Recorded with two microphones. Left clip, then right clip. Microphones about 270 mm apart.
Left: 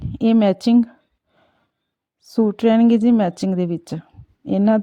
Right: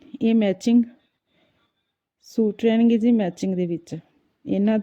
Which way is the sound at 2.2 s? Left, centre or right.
Left.